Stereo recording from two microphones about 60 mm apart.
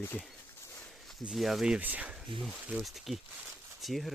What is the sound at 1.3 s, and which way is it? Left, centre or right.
Speech, centre.